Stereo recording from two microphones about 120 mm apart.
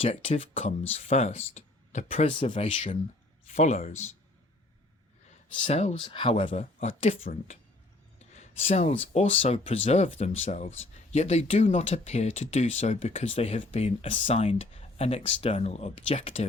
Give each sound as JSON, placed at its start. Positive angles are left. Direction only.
{"t": 0.0, "sound": "speech", "side_deg": 50}
{"t": 3.5, "sound": "speech", "side_deg": 75}
{"t": 5.6, "sound": "speech", "side_deg": 65}
{"t": 6.1, "sound": "speech", "side_deg": 45}
{"t": 6.5, "sound": "speech", "side_deg": 90}
{"t": 8.3, "sound": "speech", "side_deg": 65}
{"t": 16.2, "sound": "speech", "side_deg": 55}